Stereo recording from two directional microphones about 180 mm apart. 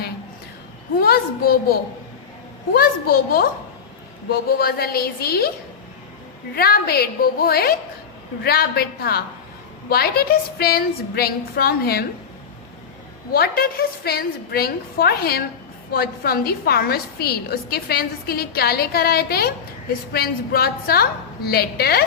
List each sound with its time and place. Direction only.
0.9 s a child's voice: 55° left (ahead or behind)
2.7 s a woman's voice: 55° left (ahead or behind)
6.6 s a woman's voice: 60° left (ahead or behind)
13.3 s a woman's voice: 55° left (ahead or behind)